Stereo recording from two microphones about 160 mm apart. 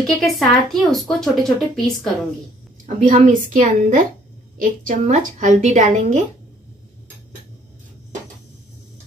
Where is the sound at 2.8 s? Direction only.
50° right (ahead or behind).